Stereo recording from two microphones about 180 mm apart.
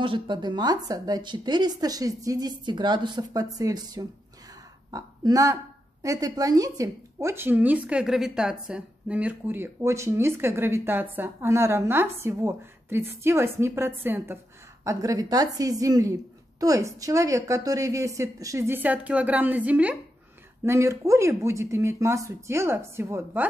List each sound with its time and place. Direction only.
0.0 s a woman's voice: 25° right (ahead or behind)